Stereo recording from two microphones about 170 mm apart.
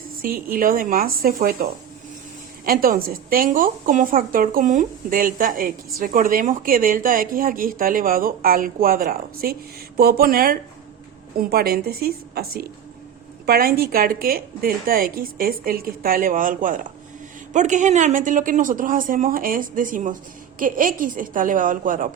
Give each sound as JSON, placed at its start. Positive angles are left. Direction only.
{"t": 0.2, "sound": "a woman's voice", "side_deg": -60}
{"t": 2.6, "sound": "a woman's voice", "side_deg": -60}